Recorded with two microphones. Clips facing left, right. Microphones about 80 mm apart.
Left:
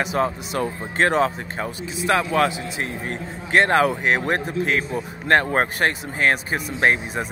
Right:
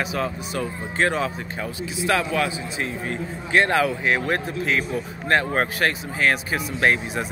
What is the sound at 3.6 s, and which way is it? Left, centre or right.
A man's voice, left.